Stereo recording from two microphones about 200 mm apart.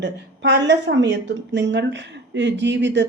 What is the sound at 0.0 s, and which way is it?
Speech, 60° right (ahead or behind).